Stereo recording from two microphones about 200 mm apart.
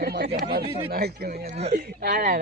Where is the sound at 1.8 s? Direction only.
45° right (ahead or behind).